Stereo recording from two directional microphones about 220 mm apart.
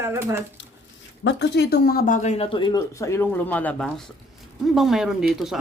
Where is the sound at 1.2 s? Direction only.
50° left (ahead or behind); by 5.6 s centre (ahead or behind).